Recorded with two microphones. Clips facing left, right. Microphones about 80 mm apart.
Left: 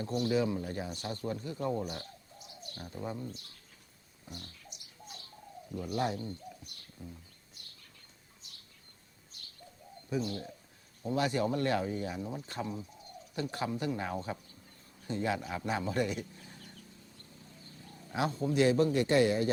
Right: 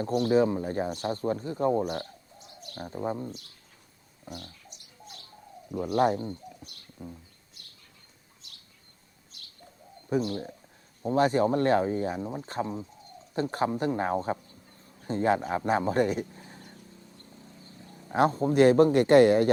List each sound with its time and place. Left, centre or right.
0.3 s speech: right
2.6 s bird: right
2.8 s speech: right
5.9 s a man's voice: right
10.1 s a man's voice: right
11.0 s speech: right
17.2 s vehicle: right
18.1 s a man's voice: right